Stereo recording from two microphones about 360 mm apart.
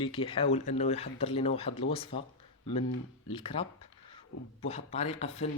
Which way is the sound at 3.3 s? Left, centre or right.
Centre.